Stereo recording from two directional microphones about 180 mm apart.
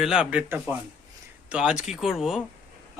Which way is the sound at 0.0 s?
5° right (ahead or behind).